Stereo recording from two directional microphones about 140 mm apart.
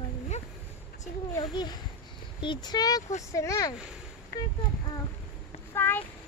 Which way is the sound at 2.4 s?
35° left (ahead or behind).